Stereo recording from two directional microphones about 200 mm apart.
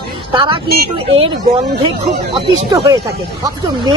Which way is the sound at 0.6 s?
50° right (ahead or behind).